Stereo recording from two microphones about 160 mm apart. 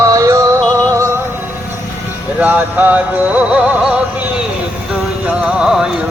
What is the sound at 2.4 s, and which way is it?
Music, 10° right (ahead or behind).